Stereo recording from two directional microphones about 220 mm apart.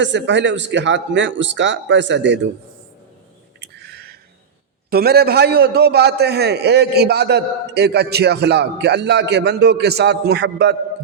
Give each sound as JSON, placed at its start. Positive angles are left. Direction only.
{"t": 0.0, "sound": "a man's voice", "side_deg": -55}
{"t": 3.6, "sound": "a sound", "side_deg": -50}
{"t": 4.9, "sound": "a man's voice", "side_deg": -45}